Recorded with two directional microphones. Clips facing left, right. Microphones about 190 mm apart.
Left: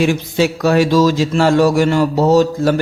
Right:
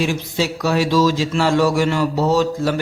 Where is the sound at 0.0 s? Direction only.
55° left (ahead or behind).